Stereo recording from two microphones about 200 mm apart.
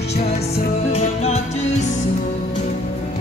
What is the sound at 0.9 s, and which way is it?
Music, 30° left (ahead or behind).